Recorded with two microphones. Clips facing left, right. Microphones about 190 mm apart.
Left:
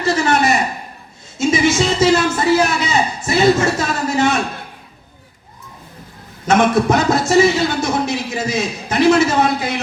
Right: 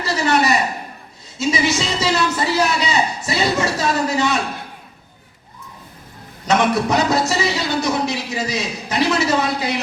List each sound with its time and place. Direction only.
0.0 s a sound: 50° left (ahead or behind)
1.4 s a man's voice: 50° left (ahead or behind)
6.5 s speech: 50° left (ahead or behind)